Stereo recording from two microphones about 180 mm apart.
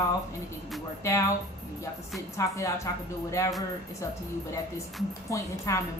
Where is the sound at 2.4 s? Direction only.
15° left (ahead or behind).